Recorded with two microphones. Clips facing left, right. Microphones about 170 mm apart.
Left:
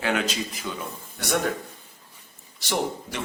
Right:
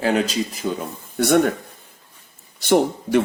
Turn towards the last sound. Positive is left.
turn(degrees=-55)  # may be behind; listen again after turning